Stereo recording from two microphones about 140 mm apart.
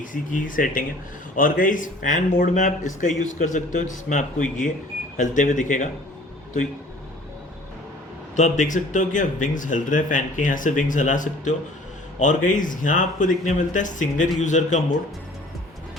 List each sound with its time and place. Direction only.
0.0 s speech: 70° left (ahead or behind)
8.4 s speech: 65° left (ahead or behind)